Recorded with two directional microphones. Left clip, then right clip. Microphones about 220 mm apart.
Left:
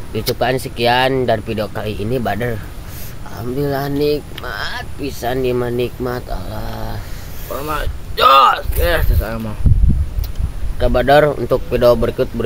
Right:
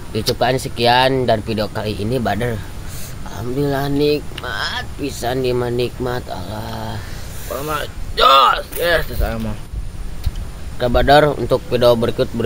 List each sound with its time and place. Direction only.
0.4 s speech: centre (ahead or behind)
10.8 s speech: 5° right (ahead or behind)